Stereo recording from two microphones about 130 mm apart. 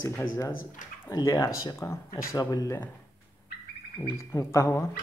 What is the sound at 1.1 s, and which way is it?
Speech, 25° left (ahead or behind).